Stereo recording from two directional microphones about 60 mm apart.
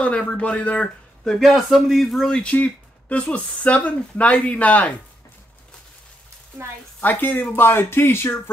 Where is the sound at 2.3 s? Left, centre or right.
Left.